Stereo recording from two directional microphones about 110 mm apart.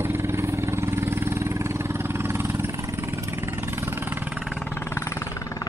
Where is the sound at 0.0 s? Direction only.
20° right (ahead or behind); by 4.6 s 5° right (ahead or behind).